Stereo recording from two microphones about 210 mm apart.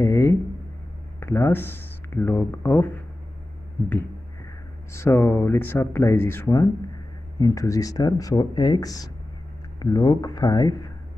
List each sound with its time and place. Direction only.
0.0 s speech: 15° left (ahead or behind)
3.8 s a sound: centre (ahead or behind)
4.9 s speech: 15° left (ahead or behind)